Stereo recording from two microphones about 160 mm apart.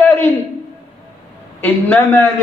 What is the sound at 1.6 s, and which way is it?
Speech, 10° left (ahead or behind).